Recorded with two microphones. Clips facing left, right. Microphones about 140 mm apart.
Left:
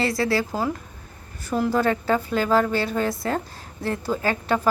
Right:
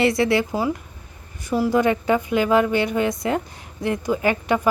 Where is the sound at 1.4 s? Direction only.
10° right (ahead or behind).